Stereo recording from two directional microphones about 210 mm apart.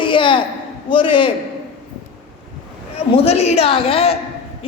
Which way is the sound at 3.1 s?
30° left (ahead or behind).